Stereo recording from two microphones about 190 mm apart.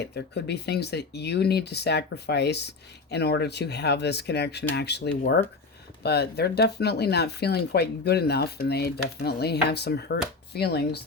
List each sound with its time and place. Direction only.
0.0 s speech: 60° left (ahead or behind)